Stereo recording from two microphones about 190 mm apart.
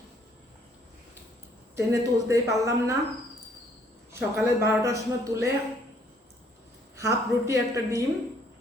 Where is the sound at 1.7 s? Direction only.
15° right (ahead or behind).